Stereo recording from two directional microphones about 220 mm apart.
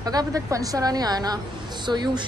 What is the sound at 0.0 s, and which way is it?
A woman's voice, 15° right (ahead or behind).